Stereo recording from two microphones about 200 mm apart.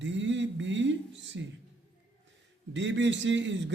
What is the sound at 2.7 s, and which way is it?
A man's voice, 65° right (ahead or behind).